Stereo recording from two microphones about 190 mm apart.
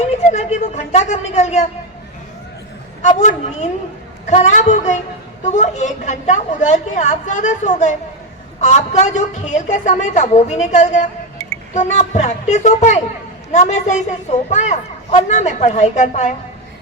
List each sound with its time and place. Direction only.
0.3 s a woman's voice: 40° left (ahead or behind)
3.2 s a woman's voice: 40° left (ahead or behind)